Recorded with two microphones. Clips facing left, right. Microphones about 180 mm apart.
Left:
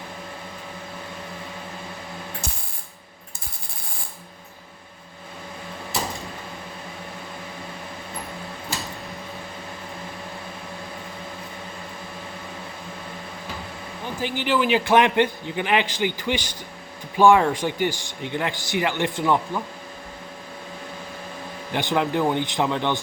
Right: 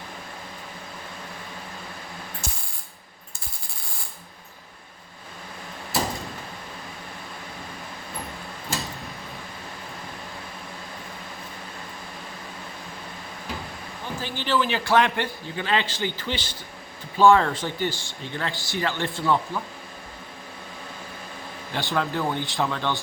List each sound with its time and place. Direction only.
14.2 s speech: 15° left (ahead or behind)
21.7 s speech: 20° left (ahead or behind)